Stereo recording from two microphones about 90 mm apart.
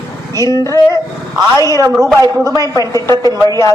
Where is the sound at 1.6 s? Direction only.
45° right (ahead or behind).